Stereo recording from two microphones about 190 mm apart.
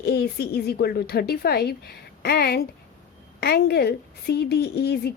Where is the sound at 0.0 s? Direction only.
60° left (ahead or behind).